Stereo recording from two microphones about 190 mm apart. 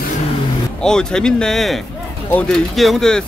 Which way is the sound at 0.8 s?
5° left (ahead or behind).